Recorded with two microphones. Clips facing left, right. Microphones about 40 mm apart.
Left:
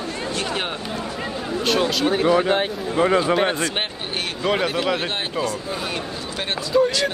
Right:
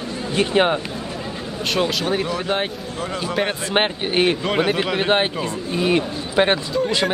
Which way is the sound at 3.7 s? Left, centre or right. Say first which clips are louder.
Right 8 dB; right.